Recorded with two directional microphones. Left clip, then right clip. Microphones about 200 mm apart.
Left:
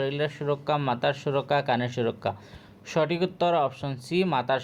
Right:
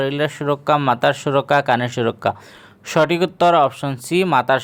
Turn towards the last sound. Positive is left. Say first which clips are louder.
# right 9 dB
turn(degrees=-45)  # may be behind; listen again after turning